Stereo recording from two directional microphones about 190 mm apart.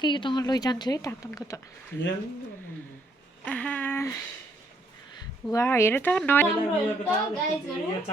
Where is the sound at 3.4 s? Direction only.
5° left (ahead or behind).